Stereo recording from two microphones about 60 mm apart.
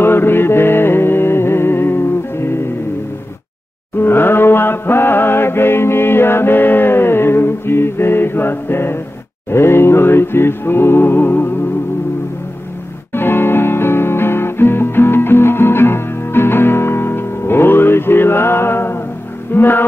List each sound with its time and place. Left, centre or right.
0.0 s music: left
4.0 s chant: left
9.5 s music: left
13.1 s music: left